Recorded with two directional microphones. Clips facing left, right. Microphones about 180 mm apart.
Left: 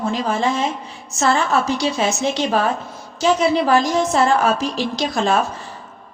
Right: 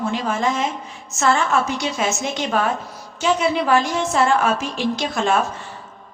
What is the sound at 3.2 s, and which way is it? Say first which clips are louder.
A woman's voice: left 3 dB; 35° left (ahead or behind).